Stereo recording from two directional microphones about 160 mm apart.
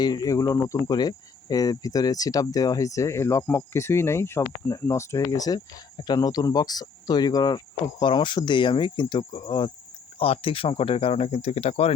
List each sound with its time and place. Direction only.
0.0 s speech: 25° left (ahead or behind); by 11.9 s 40° left (ahead or behind)